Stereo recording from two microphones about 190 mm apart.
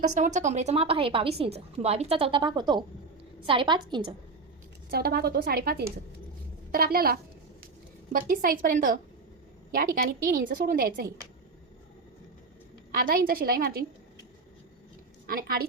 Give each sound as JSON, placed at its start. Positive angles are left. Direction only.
{"t": 0.2, "sound": "a woman's voice", "side_deg": -40}
{"t": 4.9, "sound": "a woman's voice", "side_deg": -55}
{"t": 12.9, "sound": "a woman's voice", "side_deg": -50}
{"t": 15.3, "sound": "a woman's voice", "side_deg": -50}